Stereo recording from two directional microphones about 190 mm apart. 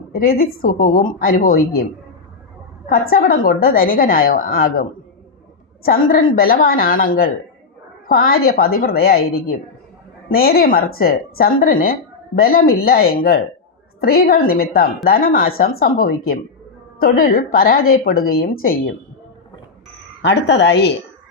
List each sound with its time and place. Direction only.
0.1 s a woman's voice: 50° left (ahead or behind)
3.1 s a woman's voice: 50° left (ahead or behind)
20.2 s speech: 65° left (ahead or behind)